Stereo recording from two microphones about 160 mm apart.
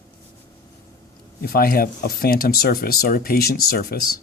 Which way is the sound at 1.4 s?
70° left (ahead or behind).